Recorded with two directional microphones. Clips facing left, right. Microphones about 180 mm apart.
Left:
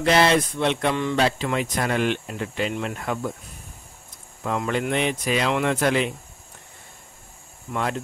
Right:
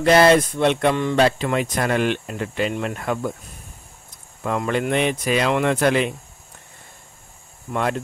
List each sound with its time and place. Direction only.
0.0 s speech: 50° right (ahead or behind)
4.5 s speech: 55° right (ahead or behind)